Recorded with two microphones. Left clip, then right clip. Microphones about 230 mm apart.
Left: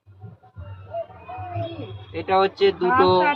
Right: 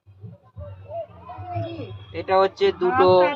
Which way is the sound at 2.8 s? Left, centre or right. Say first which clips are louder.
Even; centre.